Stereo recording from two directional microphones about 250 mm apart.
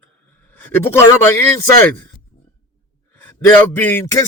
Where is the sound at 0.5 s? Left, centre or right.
Centre.